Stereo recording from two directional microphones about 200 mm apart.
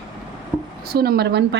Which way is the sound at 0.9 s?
50° right (ahead or behind).